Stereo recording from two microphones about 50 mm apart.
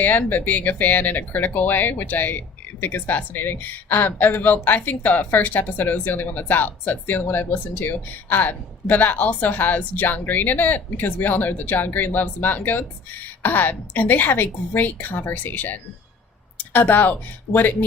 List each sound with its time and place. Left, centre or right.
0.0 s a woman's voice: left